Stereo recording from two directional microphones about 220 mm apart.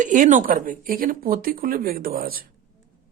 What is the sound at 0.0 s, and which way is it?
Speech, 35° right (ahead or behind).